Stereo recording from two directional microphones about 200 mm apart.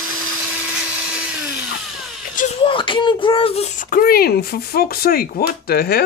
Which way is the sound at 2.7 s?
25° left (ahead or behind).